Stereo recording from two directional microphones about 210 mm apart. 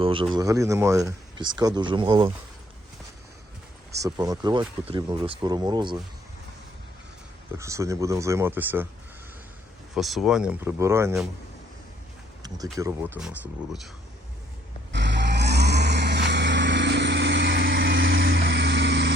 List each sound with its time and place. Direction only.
0.0 s speech: 25° right (ahead or behind)
3.9 s speech: 15° right (ahead or behind)
7.6 s speech: 15° right (ahead or behind)
9.9 s speech: centre (ahead or behind)
12.7 s speech: 15° right (ahead or behind)
14.9 s vehicle: 55° right (ahead or behind)